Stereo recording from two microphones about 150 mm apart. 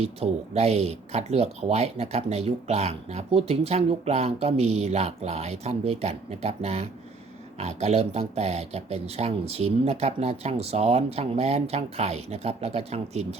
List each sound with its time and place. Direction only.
0.0 s speech: 45° right (ahead or behind)